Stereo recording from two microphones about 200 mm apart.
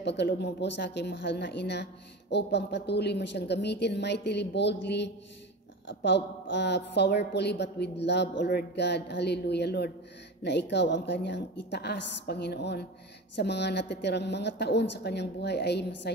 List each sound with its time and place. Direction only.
0.0 s a woman's voice: 60° left (ahead or behind)